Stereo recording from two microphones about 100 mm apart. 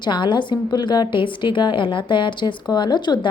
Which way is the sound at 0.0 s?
50° left (ahead or behind).